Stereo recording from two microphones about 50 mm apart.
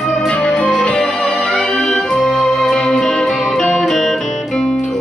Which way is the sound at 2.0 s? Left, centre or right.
Centre.